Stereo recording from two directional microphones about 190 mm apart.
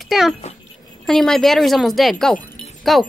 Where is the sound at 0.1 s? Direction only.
Centre (ahead or behind).